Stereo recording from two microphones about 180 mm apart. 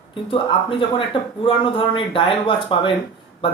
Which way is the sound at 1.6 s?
30° left (ahead or behind).